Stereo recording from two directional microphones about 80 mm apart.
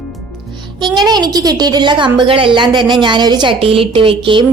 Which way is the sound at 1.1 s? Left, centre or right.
Right.